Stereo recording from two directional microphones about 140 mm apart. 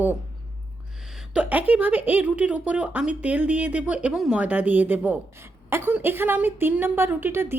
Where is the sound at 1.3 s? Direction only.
10° right (ahead or behind).